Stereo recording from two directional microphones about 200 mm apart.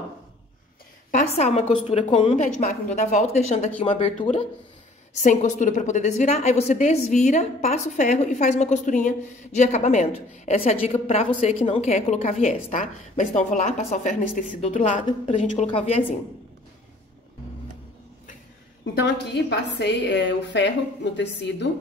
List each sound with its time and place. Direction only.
1.1 s a woman's voice: 35° left (ahead or behind)
18.9 s a woman's voice: 55° left (ahead or behind)